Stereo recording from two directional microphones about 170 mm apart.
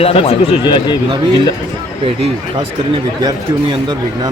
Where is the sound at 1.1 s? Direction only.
30° right (ahead or behind).